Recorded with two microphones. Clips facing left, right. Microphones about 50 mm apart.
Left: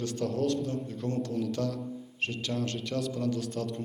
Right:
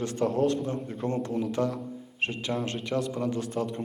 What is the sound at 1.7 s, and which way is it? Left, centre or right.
Speech, centre.